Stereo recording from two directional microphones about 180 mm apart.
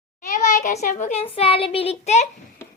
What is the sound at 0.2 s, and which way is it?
A child's voice, 45° left (ahead or behind).